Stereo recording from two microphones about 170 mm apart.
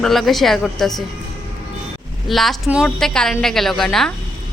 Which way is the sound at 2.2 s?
Centre (ahead or behind).